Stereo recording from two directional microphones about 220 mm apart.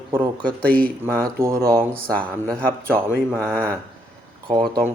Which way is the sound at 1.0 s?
10° right (ahead or behind).